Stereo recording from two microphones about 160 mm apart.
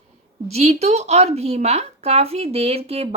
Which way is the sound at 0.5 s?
40° right (ahead or behind).